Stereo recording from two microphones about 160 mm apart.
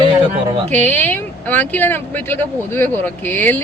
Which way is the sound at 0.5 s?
45° right (ahead or behind).